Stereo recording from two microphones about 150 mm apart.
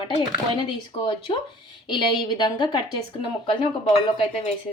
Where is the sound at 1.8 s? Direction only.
30° left (ahead or behind).